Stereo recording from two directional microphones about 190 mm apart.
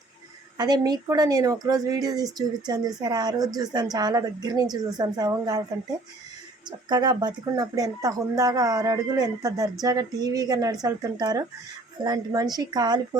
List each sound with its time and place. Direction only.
0.5 s a woman's voice: 20° right (ahead or behind)
6.7 s speech: 20° right (ahead or behind)